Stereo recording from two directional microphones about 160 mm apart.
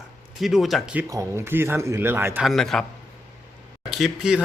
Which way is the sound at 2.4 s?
Centre (ahead or behind).